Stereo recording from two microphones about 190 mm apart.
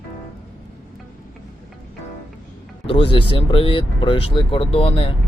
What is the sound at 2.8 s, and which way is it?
Speech, 30° left (ahead or behind).